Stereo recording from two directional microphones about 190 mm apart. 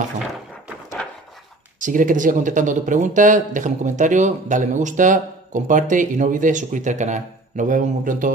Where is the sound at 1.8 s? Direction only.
45° right (ahead or behind).